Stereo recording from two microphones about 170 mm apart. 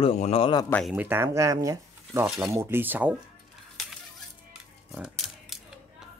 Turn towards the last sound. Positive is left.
turn(degrees=0)  # may be behind; listen again after turning